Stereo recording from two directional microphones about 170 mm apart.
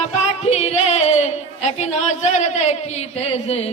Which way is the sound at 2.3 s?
40° left (ahead or behind).